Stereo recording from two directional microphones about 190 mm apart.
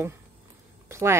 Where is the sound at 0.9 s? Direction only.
15° right (ahead or behind).